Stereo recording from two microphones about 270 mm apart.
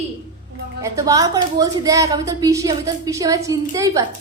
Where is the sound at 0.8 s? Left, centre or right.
Centre.